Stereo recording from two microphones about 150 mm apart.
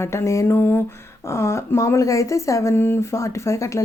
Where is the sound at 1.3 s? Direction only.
20° left (ahead or behind).